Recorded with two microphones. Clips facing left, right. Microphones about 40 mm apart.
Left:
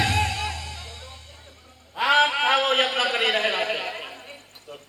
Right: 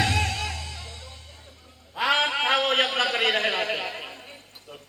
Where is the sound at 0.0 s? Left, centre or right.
Left.